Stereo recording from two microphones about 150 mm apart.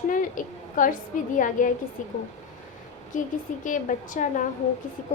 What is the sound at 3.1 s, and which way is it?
A woman's voice, 60° left (ahead or behind).